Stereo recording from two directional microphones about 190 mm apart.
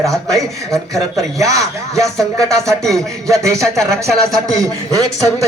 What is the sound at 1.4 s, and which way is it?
Speech, 15° right (ahead or behind).